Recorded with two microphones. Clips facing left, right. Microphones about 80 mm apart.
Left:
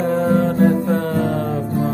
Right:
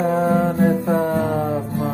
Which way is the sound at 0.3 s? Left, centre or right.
Centre.